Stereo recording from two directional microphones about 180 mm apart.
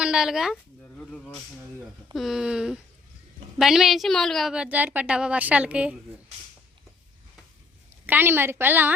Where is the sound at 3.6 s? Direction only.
Centre (ahead or behind).